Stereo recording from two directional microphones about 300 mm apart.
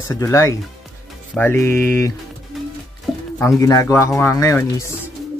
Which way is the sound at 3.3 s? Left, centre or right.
Centre.